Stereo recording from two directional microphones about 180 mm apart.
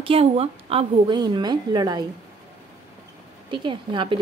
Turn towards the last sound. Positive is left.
turn(degrees=-25)  # may be behind; listen again after turning